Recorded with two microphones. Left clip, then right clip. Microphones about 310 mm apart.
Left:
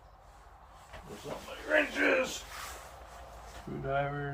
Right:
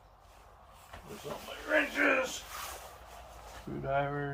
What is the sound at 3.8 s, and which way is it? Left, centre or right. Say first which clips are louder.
Speech: right 1 dB; centre.